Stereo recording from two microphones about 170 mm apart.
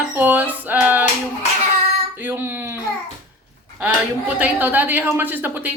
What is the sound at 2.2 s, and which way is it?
Speech, 15° right (ahead or behind).